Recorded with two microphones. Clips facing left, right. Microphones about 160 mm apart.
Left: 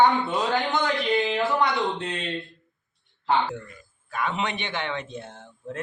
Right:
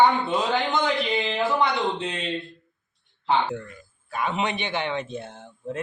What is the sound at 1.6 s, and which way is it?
Speech, 15° right (ahead or behind).